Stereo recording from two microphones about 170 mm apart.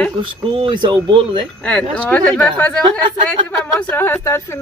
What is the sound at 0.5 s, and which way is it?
Speech, 30° right (ahead or behind).